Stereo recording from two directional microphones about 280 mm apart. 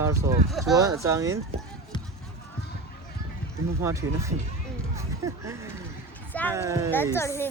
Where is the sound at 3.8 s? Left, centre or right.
Centre.